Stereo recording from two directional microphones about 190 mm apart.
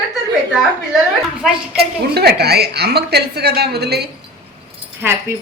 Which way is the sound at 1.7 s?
55° right (ahead or behind).